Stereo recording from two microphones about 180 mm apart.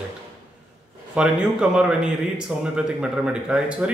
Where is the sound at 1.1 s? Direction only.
5° right (ahead or behind).